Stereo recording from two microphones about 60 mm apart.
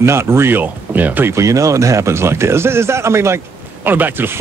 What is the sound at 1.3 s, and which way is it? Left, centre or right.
Speech, right.